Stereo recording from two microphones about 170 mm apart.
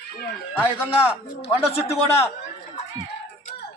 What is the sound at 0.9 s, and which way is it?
Speech, 35° left (ahead or behind).